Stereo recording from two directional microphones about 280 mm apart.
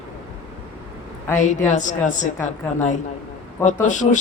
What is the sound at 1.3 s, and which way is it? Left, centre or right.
A man's voice, left.